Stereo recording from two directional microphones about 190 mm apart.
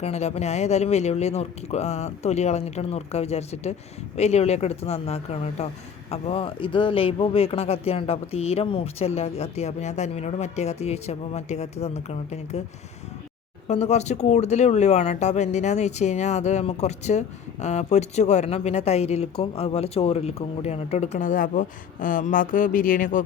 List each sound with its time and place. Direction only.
0.0 s speech: 35° left (ahead or behind)
13.7 s speech: 35° left (ahead or behind)